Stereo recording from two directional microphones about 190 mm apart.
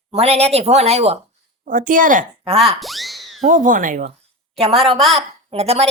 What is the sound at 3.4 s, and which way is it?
Speech, 45° right (ahead or behind).